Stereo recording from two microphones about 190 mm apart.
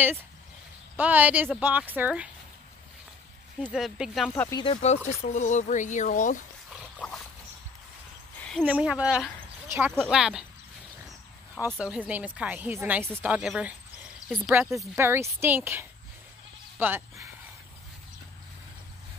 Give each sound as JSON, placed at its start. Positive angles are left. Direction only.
{"t": 0.9, "sound": "speech", "side_deg": -10}
{"t": 3.6, "sound": "speech", "side_deg": -5}
{"t": 4.5, "sound": "speech", "side_deg": 20}
{"t": 5.2, "sound": "speech", "side_deg": 40}
{"t": 6.7, "sound": "dog", "side_deg": 5}
{"t": 8.4, "sound": "a sound", "side_deg": 5}
{"t": 8.6, "sound": "speech", "side_deg": -5}
{"t": 11.8, "sound": "speech", "side_deg": -5}